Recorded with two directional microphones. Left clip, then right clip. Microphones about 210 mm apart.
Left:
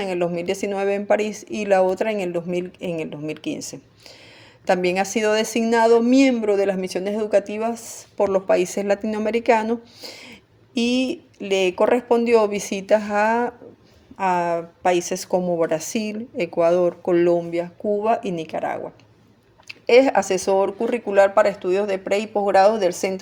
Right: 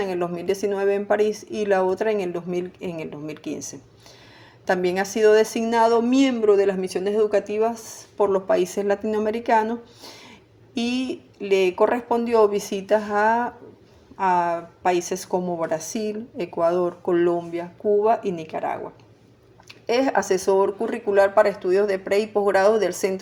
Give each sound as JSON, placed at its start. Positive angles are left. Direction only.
{"t": 0.0, "sound": "speech", "side_deg": 35}